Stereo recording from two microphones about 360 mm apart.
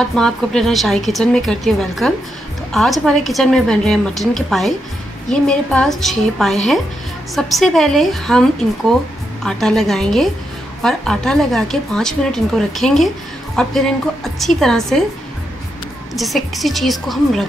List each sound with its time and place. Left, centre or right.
0.0 s a woman's voice: centre
16.2 s a woman's voice: centre